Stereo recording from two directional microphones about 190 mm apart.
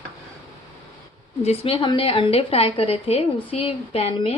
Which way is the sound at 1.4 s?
30° left (ahead or behind).